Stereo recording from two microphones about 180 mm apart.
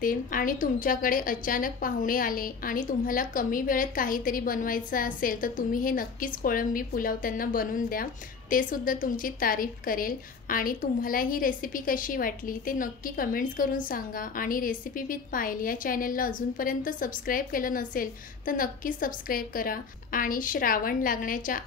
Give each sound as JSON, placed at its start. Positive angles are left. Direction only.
{"t": 0.0, "sound": "a woman's voice", "side_deg": 50}